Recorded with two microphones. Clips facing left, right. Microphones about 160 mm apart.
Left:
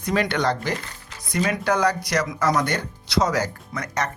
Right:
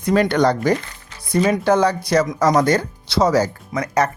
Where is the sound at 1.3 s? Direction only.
30° right (ahead or behind).